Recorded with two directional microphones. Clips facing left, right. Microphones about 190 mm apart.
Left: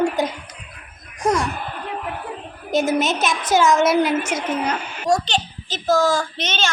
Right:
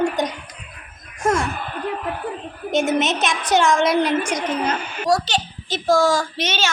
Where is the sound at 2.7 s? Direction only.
Centre (ahead or behind).